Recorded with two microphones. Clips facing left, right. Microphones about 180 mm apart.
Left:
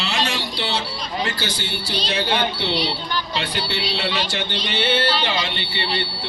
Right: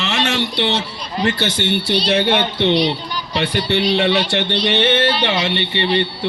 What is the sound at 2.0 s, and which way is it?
A man's voice, 65° right (ahead or behind).